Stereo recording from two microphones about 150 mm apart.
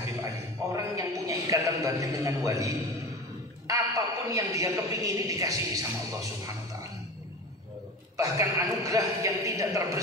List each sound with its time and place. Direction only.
0.2 s a sound: 20° right (ahead or behind)
3.6 s a man's voice: 20° right (ahead or behind)
8.2 s a man's voice: 20° right (ahead or behind)